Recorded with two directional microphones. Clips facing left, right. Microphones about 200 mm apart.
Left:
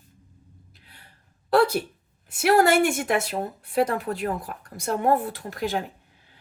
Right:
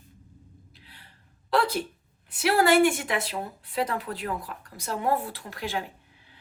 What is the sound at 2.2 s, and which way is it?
A woman's voice, 45° left (ahead or behind).